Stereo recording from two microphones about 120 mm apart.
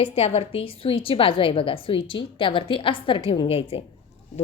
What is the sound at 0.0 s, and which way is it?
A woman's voice, 55° left (ahead or behind).